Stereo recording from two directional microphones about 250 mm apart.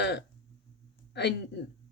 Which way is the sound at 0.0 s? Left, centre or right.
Left.